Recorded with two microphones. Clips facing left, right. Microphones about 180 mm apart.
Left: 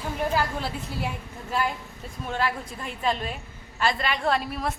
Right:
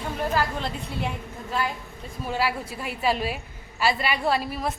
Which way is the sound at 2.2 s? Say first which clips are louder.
Right 1 dB; 5° right (ahead or behind).